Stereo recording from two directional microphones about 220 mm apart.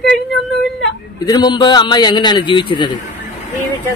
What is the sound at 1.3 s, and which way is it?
A man's voice, 20° left (ahead or behind).